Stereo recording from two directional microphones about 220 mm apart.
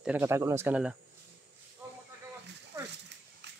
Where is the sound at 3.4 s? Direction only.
50° right (ahead or behind).